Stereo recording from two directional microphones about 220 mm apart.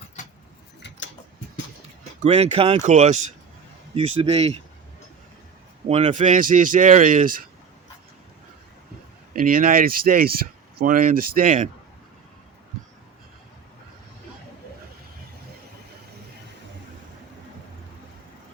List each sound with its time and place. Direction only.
0.8 s tick-tock: 55° left (ahead or behind)
2.2 s speech: 30° right (ahead or behind)
5.9 s speech: 30° right (ahead or behind)
9.3 s speech: 40° right (ahead or behind)